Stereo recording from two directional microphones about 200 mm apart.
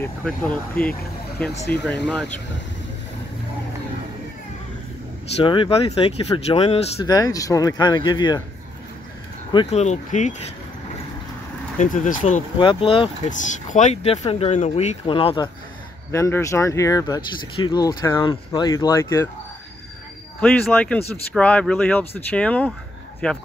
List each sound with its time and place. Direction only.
0.0 s speech: 5° left (ahead or behind)
5.4 s speech: 25° left (ahead or behind)
7.1 s speech: 20° left (ahead or behind)
9.5 s speech: 30° left (ahead or behind)
11.8 s speech: 40° left (ahead or behind)
12.5 s speech: 25° left (ahead or behind)
13.3 s speech: 40° left (ahead or behind)
16.1 s speech: 15° left (ahead or behind)
20.3 s speech: 5° left (ahead or behind)